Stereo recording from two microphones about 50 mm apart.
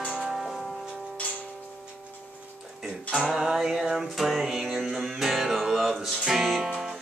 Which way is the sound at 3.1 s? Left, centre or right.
Centre.